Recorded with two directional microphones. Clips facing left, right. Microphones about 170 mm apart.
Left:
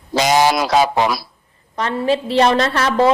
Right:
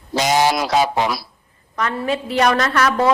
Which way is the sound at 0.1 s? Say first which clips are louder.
Left 2 dB; 90° left.